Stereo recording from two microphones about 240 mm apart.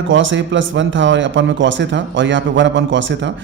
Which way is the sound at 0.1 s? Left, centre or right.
Right.